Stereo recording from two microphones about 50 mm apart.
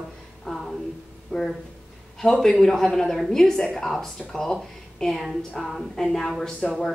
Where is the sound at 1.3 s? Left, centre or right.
Centre.